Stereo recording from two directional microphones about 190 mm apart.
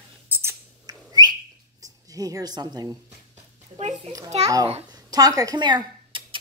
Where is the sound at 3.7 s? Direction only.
35° right (ahead or behind).